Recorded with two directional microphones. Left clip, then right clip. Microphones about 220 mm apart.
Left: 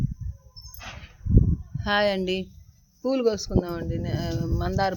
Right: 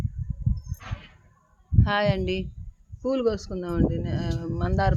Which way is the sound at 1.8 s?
10° left (ahead or behind).